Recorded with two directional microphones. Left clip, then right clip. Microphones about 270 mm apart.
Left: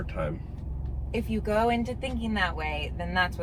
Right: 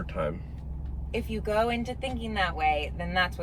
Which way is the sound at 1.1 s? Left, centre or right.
Centre.